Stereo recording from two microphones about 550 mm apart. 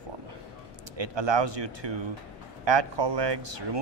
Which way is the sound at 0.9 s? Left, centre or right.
Right.